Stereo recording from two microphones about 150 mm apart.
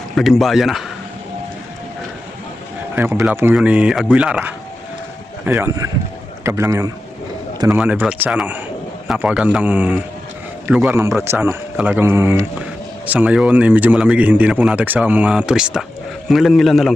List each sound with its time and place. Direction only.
0.2 s a man's voice: centre (ahead or behind)
2.9 s speech: 15° right (ahead or behind)
5.5 s a man's voice: 20° right (ahead or behind); by 16.9 s centre (ahead or behind)